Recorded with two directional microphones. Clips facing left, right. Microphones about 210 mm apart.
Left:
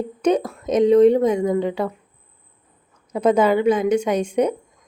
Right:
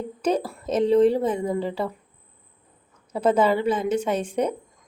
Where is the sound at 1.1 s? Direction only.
5° right (ahead or behind).